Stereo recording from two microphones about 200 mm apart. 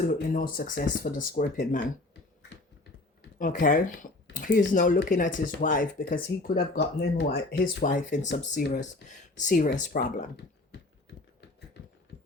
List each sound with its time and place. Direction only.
0.1 s speech: 45° left (ahead or behind)
3.3 s speech: 40° left (ahead or behind)
11.8 s a sound: 55° left (ahead or behind)